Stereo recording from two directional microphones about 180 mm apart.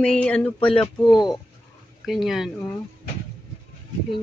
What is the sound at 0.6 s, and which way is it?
Speech, 30° left (ahead or behind).